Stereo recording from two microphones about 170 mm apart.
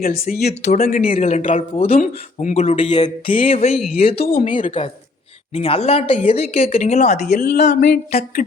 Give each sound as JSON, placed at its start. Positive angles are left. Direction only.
{"t": 0.3, "sound": "speech", "side_deg": 75}
{"t": 0.8, "sound": "speech", "side_deg": 60}
{"t": 1.0, "sound": "a man's voice", "side_deg": 40}
{"t": 1.7, "sound": "a sound", "side_deg": 30}
{"t": 2.0, "sound": "a sound", "side_deg": 50}
{"t": 6.7, "sound": "a man's voice", "side_deg": 45}
{"t": 7.3, "sound": "speech", "side_deg": 65}
{"t": 7.6, "sound": "a man's voice", "side_deg": 45}
{"t": 7.9, "sound": "speech", "side_deg": 65}